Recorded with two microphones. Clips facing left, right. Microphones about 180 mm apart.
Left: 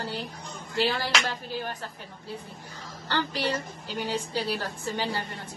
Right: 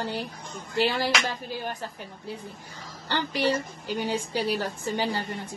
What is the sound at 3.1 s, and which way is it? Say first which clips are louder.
A woman's voice: right 3 dB; 15° right (ahead or behind).